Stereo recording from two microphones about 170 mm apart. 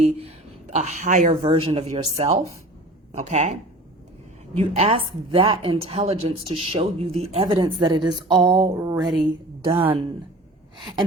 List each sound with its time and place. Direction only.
0.0 s speech: 35° right (ahead or behind)
1.5 s a woman's voice: 30° right (ahead or behind)
8.0 s a sound: 25° right (ahead or behind)
9.6 s a woman's voice: 30° right (ahead or behind)